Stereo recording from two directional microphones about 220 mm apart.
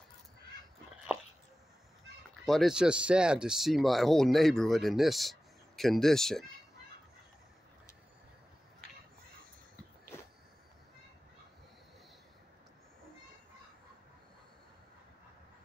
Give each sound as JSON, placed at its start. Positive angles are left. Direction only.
{"t": 2.4, "sound": "speech", "side_deg": 0}